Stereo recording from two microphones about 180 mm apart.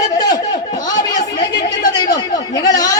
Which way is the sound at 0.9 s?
20° left (ahead or behind).